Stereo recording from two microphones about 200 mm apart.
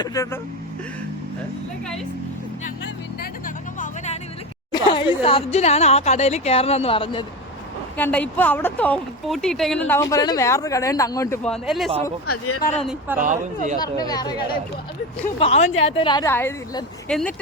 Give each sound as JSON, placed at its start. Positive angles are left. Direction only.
{"t": 0.0, "sound": "speech", "side_deg": 15}
{"t": 3.8, "sound": "music", "side_deg": 35}
{"t": 4.7, "sound": "a sound", "side_deg": 25}
{"t": 5.2, "sound": "speech", "side_deg": 30}
{"t": 7.9, "sound": "speech", "side_deg": 10}
{"t": 11.4, "sound": "speech", "side_deg": 0}
{"t": 13.1, "sound": "speech", "side_deg": -40}
{"t": 13.7, "sound": "speech", "side_deg": 20}
{"t": 15.4, "sound": "speech", "side_deg": 30}
{"t": 16.3, "sound": "speech", "side_deg": 10}